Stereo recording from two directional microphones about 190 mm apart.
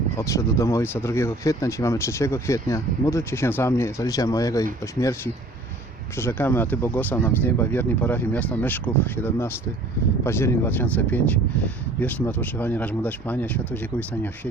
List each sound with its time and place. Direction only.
0.2 s speech: 15° left (ahead or behind)